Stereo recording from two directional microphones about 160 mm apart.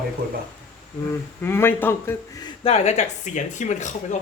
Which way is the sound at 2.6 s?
40° left (ahead or behind).